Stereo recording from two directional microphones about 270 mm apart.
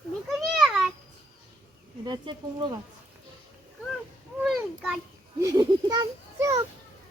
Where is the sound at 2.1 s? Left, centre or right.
Centre.